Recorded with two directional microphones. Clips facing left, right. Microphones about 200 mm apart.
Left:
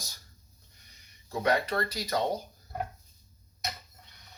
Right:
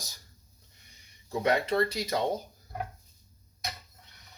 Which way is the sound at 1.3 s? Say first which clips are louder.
Right 1 dB; 25° right (ahead or behind).